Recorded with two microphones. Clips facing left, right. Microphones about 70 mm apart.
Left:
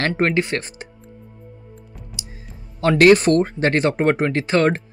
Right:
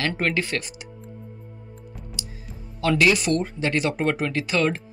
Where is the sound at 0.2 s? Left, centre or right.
Left.